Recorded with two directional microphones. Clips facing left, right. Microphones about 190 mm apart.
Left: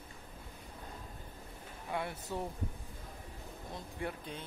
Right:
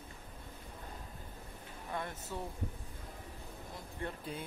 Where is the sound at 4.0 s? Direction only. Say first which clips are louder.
Left 2 dB; 15° left (ahead or behind).